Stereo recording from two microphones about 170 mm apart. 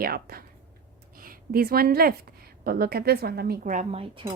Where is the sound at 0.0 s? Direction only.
60° right (ahead or behind).